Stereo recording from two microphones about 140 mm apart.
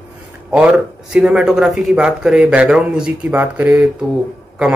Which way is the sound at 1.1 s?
5° right (ahead or behind).